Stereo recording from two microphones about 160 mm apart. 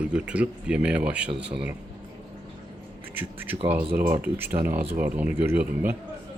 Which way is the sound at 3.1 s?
10° right (ahead or behind).